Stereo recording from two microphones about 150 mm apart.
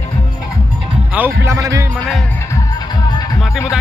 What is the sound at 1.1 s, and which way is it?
Speech, 15° right (ahead or behind).